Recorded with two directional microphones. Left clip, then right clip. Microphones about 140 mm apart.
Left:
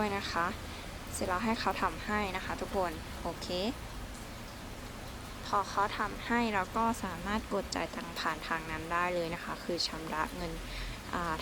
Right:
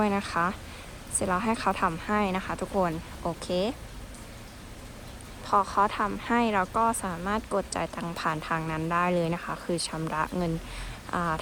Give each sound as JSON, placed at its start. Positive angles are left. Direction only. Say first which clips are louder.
{"t": 0.0, "sound": "speech", "louder": "right 6 dB", "side_deg": -10}
{"t": 5.5, "sound": "speech", "louder": "right 7 dB", "side_deg": 0}